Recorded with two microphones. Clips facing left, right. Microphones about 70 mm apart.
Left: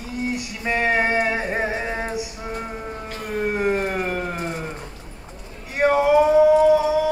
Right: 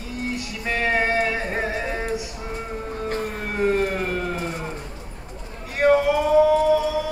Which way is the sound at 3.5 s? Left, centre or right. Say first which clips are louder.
Right 4 dB; centre.